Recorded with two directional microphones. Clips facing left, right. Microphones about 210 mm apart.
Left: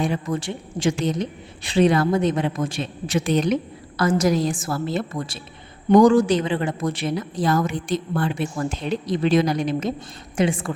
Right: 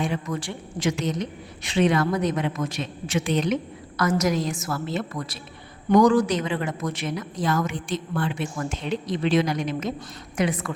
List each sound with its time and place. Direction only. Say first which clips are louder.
0.0 s a woman's voice: left 3 dB; 35° left (ahead or behind)
0.3 s a woman's voice: left 3 dB; 25° left (ahead or behind)